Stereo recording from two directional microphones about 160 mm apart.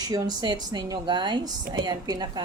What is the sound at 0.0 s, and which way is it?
A woman's voice, 25° right (ahead or behind).